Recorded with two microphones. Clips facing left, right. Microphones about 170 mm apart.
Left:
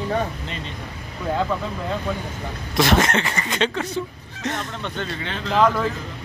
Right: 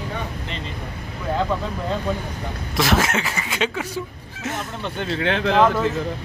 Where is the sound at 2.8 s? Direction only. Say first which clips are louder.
Left 2 dB; 5° right (ahead or behind).